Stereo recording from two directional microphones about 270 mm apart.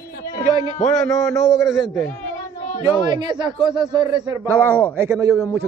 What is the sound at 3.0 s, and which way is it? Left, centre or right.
A man's voice, centre.